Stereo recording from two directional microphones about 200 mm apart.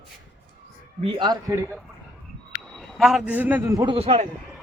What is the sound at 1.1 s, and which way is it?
Speech, 20° right (ahead or behind).